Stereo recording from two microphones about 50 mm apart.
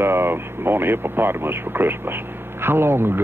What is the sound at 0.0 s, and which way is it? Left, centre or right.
Speech, right.